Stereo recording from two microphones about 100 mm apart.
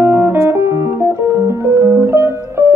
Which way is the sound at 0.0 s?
20° right (ahead or behind).